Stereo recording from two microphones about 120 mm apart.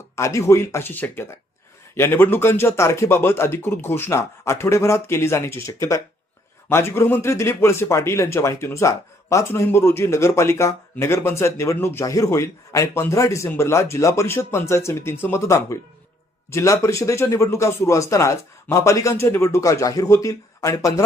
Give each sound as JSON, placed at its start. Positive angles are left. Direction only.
{"t": 0.2, "sound": "a man's voice", "side_deg": 25}